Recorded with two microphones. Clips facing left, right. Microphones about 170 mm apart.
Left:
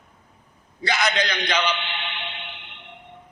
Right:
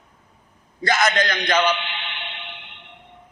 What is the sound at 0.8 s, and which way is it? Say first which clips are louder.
Speech: right 3 dB; 45° right (ahead or behind).